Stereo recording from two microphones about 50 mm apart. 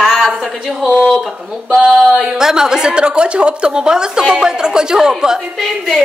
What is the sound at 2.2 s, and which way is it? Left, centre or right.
A woman's voice, centre.